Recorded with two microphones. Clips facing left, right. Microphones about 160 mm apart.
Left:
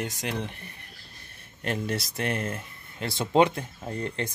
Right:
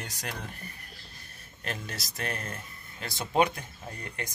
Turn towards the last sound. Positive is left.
turn(degrees=30)  # may be behind; listen again after turning